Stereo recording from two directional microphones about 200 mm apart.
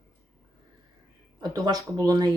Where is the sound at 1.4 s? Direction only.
20° right (ahead or behind).